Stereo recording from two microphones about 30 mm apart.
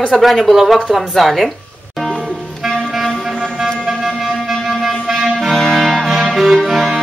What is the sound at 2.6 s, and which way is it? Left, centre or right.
Music, centre.